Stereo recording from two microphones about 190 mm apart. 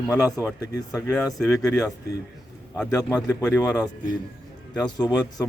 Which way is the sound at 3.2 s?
10° left (ahead or behind).